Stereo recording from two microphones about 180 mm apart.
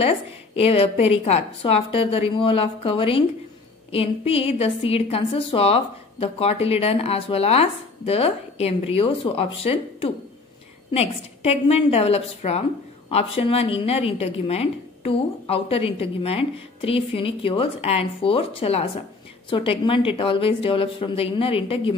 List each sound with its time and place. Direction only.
0.6 s a woman's voice: 30° left (ahead or behind)